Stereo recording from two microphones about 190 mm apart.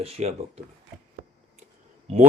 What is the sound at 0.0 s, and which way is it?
Speech, 30° right (ahead or behind).